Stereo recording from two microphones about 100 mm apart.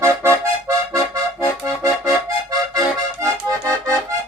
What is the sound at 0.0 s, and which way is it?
Accordion, 25° right (ahead or behind).